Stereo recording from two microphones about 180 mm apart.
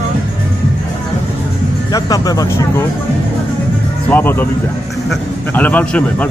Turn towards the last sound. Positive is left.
turn(degrees=5)  # may be behind; listen again after turning